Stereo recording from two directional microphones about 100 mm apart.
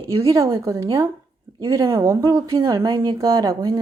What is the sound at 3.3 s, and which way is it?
Speech, 35° right (ahead or behind).